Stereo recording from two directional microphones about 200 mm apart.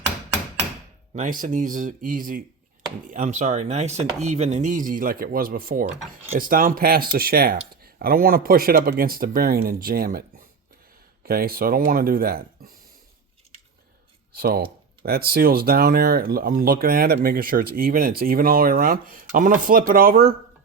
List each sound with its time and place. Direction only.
1.1 s speech: 40° right (ahead or behind)
14.3 s speech: 50° right (ahead or behind)